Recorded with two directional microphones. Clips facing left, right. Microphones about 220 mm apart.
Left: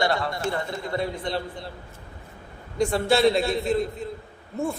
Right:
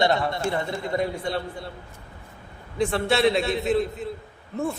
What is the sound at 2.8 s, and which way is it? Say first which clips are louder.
A man's voice: left 1 dB; centre (ahead or behind).